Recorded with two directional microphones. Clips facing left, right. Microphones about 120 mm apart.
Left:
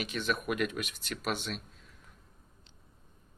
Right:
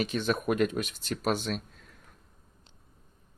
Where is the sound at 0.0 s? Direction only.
35° right (ahead or behind).